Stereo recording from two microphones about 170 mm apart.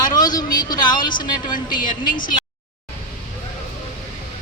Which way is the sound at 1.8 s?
50° left (ahead or behind).